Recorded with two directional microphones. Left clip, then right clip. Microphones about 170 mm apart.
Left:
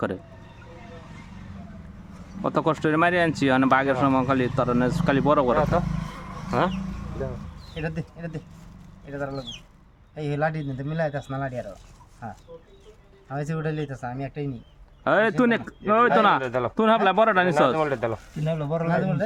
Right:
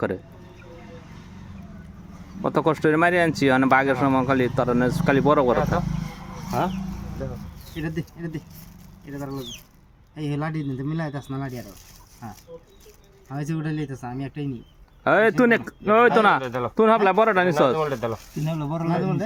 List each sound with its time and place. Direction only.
2.4 s speech: 10° right (ahead or behind)
6.5 s speech: 20° left (ahead or behind)
7.8 s a man's voice: 25° left (ahead or behind)
13.3 s a man's voice: 30° left (ahead or behind)
15.0 s speech: 10° right (ahead or behind)
16.4 s speech: 15° left (ahead or behind)
16.7 s speech: 10° right (ahead or behind)
17.7 s speech: 10° left (ahead or behind)
18.4 s speech: 35° left (ahead or behind)